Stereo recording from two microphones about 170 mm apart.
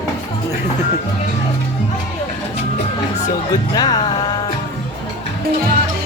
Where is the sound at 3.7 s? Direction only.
25° left (ahead or behind).